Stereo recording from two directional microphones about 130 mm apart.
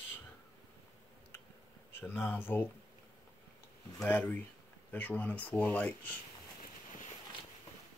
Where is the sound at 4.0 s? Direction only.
10° left (ahead or behind).